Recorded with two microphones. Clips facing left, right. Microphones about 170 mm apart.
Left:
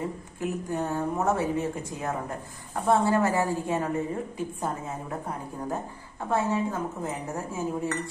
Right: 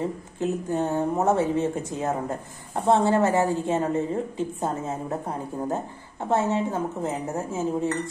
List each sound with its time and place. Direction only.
0.4 s a woman's voice: 25° right (ahead or behind)
6.2 s a woman's voice: 25° right (ahead or behind)